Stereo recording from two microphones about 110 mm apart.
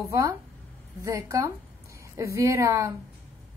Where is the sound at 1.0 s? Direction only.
30° right (ahead or behind).